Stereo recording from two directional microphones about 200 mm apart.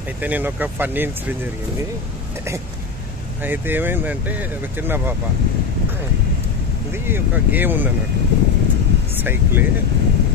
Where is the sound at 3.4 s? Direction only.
10° right (ahead or behind).